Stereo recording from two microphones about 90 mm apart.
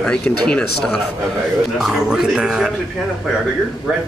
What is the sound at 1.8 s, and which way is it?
Speech, 5° right (ahead or behind).